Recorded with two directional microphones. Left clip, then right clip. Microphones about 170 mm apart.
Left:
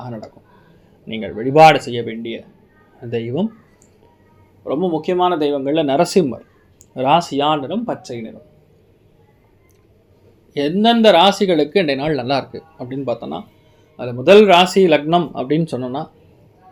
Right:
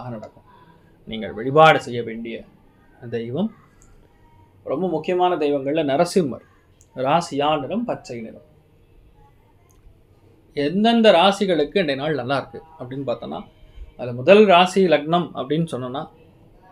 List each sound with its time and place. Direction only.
1.0 s speech: 25° left (ahead or behind)
4.6 s speech: 40° left (ahead or behind)
10.5 s speech: 40° left (ahead or behind)